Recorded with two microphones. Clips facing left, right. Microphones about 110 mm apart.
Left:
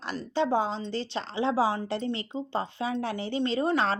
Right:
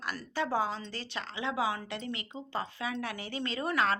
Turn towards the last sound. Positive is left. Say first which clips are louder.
# left 4 dB
turn(degrees=30)  # may be behind; listen again after turning